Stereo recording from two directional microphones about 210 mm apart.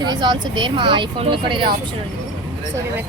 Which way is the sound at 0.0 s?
20° right (ahead or behind).